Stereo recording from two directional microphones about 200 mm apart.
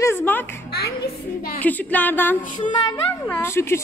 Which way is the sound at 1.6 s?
10° left (ahead or behind).